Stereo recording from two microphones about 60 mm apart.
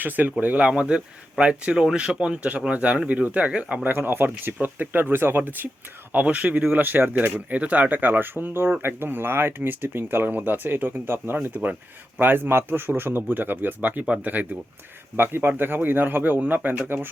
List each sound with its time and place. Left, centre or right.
0.0 s speech: right
3.8 s speech: right
11.5 s speech: right
12.2 s speech: right